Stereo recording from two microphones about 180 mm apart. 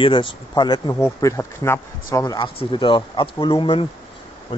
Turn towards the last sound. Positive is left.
turn(degrees=30)  # may be behind; listen again after turning